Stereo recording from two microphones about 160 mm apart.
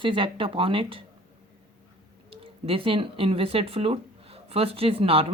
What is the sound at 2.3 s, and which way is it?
Speech, 35° right (ahead or behind).